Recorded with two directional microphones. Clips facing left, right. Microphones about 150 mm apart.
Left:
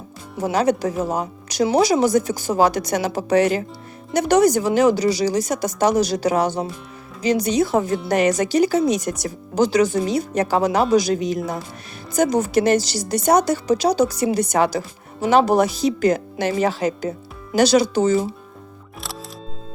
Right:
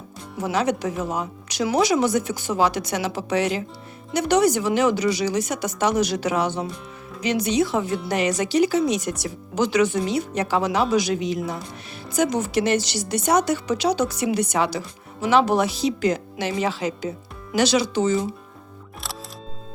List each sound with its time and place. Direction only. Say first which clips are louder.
0.3 s a woman's voice: left 4 dB; 35° left (ahead or behind)